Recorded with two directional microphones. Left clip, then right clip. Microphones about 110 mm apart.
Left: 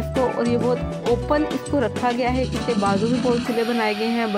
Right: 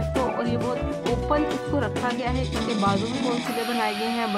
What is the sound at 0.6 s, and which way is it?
Speech, centre (ahead or behind).